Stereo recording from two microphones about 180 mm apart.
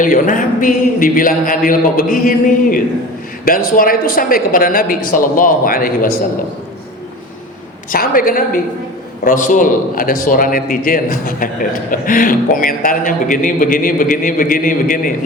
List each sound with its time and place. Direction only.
0.0 s a man's voice: 45° left (ahead or behind)
7.9 s a man's voice: 50° left (ahead or behind)